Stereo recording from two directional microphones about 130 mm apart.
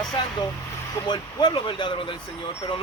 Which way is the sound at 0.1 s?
35° left (ahead or behind).